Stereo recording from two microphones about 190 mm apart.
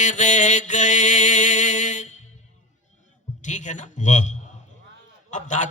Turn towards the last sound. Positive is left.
turn(degrees=40)  # may be behind; listen again after turning